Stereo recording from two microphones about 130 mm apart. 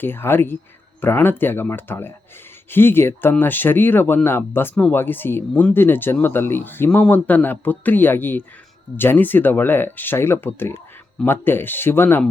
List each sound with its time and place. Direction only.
0.0 s speech: 15° left (ahead or behind)